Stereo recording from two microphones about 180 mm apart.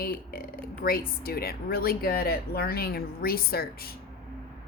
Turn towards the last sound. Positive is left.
turn(degrees=55)  # may be behind; listen again after turning